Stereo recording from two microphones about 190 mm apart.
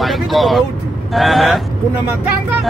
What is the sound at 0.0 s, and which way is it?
Speech, centre (ahead or behind).